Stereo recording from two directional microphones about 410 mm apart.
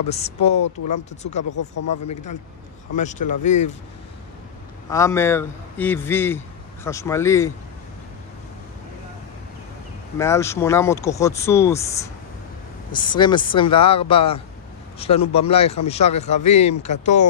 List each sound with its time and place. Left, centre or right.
0.1 s speech: centre
1.5 s speech: left
3.0 s speech: centre
4.9 s a man's voice: centre
10.1 s speech: centre
12.9 s speech: centre